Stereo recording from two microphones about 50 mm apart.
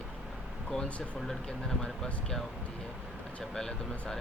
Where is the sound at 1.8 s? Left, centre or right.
Centre.